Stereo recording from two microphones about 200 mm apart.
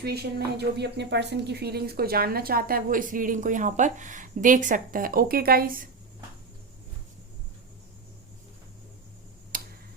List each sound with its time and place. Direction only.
0.0 s speech: 55° right (ahead or behind)
9.5 s tick: 45° right (ahead or behind)